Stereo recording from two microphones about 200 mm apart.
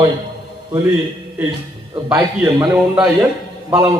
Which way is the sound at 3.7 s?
15° right (ahead or behind).